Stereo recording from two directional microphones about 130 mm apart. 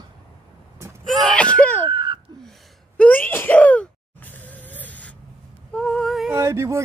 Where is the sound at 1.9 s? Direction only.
35° right (ahead or behind).